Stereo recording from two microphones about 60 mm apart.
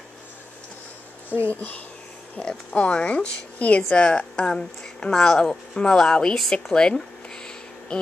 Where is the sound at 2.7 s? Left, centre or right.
Centre.